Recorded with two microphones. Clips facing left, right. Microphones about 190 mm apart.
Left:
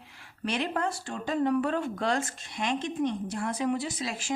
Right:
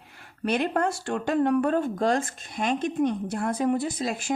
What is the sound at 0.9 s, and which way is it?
Speech, 75° right (ahead or behind).